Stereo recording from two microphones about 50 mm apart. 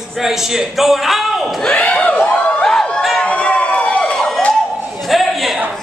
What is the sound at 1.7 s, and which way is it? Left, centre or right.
Speech, left.